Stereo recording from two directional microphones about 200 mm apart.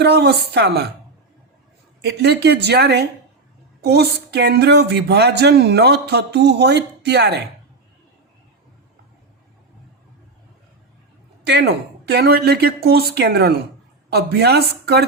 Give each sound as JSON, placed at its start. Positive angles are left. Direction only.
{"t": 0.0, "sound": "a woman's voice", "side_deg": -55}
{"t": 2.0, "sound": "a woman's voice", "side_deg": -55}
{"t": 11.4, "sound": "a woman's voice", "side_deg": -55}